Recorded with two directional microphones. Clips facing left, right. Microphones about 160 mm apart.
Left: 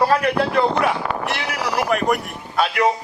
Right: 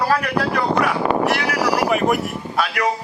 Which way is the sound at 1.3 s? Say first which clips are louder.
Right 5 dB; 60° right (ahead or behind).